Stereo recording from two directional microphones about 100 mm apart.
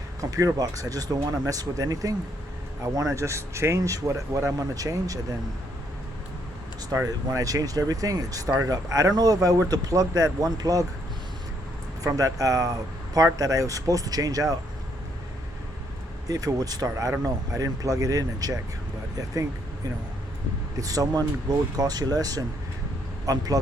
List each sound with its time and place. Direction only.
0.2 s speech: 35° right (ahead or behind)
6.9 s speech: 35° right (ahead or behind)
12.0 s speech: 35° right (ahead or behind)
16.3 s speech: 35° right (ahead or behind)
20.7 s speech: 35° right (ahead or behind)
23.2 s vehicle: 40° right (ahead or behind)